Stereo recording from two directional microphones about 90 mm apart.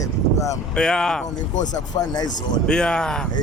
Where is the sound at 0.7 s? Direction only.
10° left (ahead or behind).